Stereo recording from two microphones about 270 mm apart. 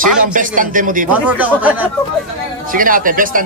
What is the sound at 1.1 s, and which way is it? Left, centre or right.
Speech, centre.